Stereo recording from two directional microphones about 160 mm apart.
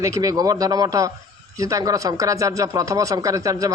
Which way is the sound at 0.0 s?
20° right (ahead or behind).